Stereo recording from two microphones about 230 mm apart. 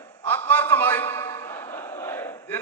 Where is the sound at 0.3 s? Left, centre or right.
Centre.